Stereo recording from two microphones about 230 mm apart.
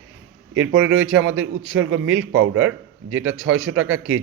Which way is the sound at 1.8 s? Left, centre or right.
Right.